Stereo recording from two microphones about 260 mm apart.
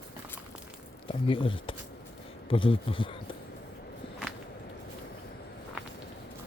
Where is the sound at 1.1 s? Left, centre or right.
Centre.